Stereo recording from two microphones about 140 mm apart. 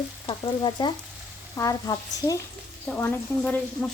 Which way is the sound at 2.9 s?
10° left (ahead or behind).